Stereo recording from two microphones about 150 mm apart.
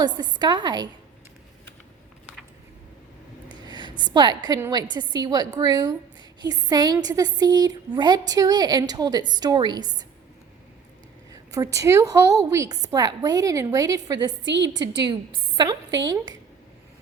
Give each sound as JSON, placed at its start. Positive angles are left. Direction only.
{"t": 0.0, "sound": "a woman's voice", "side_deg": -30}
{"t": 3.5, "sound": "a sound", "side_deg": -30}
{"t": 4.7, "sound": "a woman's voice", "side_deg": -30}
{"t": 11.3, "sound": "a woman's voice", "side_deg": -20}